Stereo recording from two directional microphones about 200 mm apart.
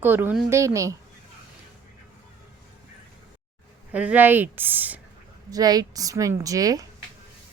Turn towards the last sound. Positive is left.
turn(degrees=-15)  # may be behind; listen again after turning